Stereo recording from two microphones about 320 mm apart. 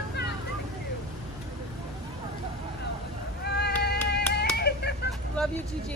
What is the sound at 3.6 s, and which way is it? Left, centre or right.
Cat, left.